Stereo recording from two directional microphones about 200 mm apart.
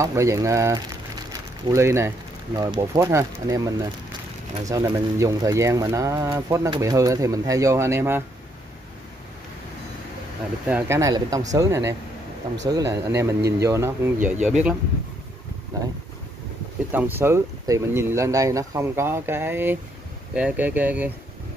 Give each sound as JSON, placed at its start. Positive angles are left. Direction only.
{"t": 0.0, "sound": "speech", "side_deg": -15}
{"t": 10.7, "sound": "speech", "side_deg": -15}
{"t": 15.7, "sound": "speech", "side_deg": -15}
{"t": 16.9, "sound": "speech", "side_deg": -10}